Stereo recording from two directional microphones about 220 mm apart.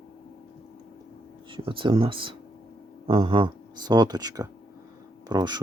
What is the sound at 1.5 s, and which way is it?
Speech, 20° right (ahead or behind).